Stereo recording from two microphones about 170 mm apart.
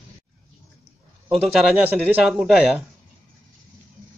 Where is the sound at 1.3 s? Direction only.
Centre (ahead or behind).